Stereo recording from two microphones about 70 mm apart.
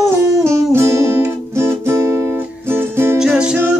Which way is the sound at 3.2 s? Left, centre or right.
Centre.